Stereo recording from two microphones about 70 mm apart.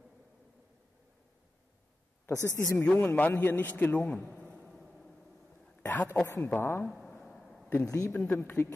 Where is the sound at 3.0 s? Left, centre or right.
Left.